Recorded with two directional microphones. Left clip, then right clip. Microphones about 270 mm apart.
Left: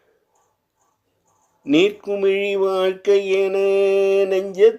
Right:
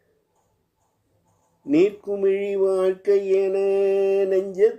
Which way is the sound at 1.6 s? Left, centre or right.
Centre.